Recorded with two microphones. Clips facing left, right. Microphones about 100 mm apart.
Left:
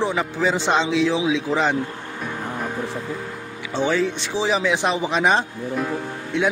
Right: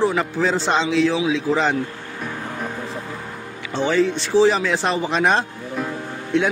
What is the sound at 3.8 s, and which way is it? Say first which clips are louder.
Speech: right 2 dB; 10° left (ahead or behind).